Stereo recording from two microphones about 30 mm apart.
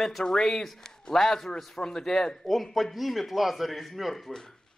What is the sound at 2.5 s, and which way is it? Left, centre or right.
Speech, centre.